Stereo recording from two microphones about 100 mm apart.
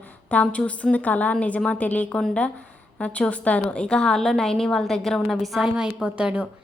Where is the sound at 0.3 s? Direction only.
10° left (ahead or behind).